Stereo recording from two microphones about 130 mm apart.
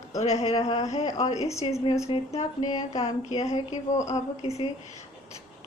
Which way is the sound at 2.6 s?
35° left (ahead or behind).